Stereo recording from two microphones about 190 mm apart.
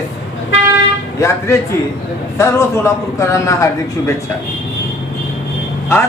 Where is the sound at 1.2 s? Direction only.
15° left (ahead or behind).